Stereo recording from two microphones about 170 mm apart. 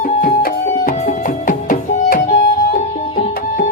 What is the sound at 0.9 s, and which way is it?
Music, 50° left (ahead or behind).